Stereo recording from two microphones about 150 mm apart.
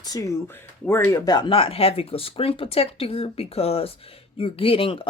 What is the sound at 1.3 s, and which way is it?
A woman's voice, 30° left (ahead or behind).